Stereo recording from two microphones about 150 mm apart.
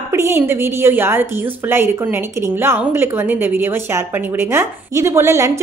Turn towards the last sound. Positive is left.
turn(degrees=-20)  # may be behind; listen again after turning